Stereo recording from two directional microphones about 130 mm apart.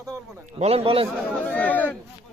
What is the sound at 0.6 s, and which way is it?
Speech, 50° right (ahead or behind).